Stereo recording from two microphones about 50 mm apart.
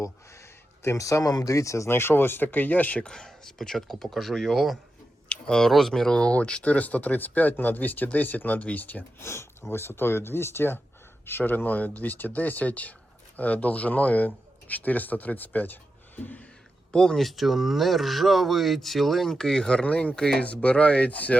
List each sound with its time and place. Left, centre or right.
0.0 s speech: left
1.9 s speech: left
3.0 s speech: centre; by 9.0 s left
9.1 s speech: left
16.9 s speech: centre
17.2 s speech: centre
20.4 s speech: left